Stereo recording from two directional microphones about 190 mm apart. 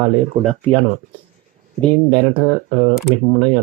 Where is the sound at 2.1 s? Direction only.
30° right (ahead or behind).